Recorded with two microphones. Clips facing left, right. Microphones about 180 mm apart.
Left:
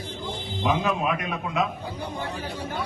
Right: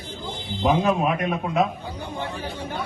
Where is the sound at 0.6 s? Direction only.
45° right (ahead or behind).